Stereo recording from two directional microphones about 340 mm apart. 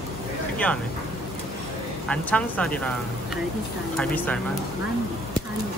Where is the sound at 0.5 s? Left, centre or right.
Centre.